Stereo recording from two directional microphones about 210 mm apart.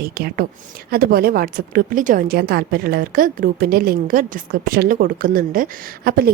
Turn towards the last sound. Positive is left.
turn(degrees=-45)  # may be behind; listen again after turning